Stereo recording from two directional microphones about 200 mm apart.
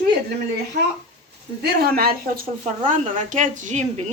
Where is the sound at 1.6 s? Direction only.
50° right (ahead or behind).